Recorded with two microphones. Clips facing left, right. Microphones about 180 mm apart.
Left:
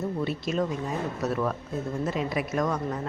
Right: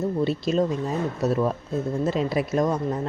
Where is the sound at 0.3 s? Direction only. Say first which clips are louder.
Right 5 dB; 30° right (ahead or behind).